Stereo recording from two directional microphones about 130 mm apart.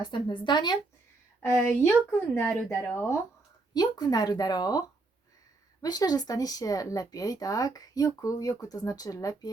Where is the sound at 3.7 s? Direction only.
30° left (ahead or behind).